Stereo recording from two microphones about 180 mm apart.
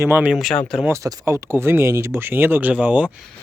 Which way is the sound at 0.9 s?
15° right (ahead or behind).